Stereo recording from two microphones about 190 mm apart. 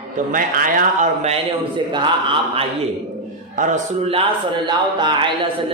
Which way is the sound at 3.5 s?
40° right (ahead or behind).